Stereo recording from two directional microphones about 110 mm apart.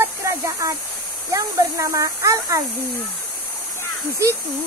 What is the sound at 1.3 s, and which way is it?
Speech, 30° right (ahead or behind).